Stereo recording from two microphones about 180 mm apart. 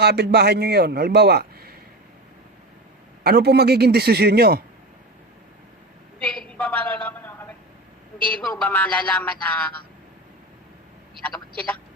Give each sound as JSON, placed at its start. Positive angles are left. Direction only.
{"t": 0.0, "sound": "a man's voice", "side_deg": -65}
{"t": 3.2, "sound": "a man's voice", "side_deg": -65}
{"t": 6.6, "sound": "a sound", "side_deg": 10}
{"t": 8.3, "sound": "speech", "side_deg": 5}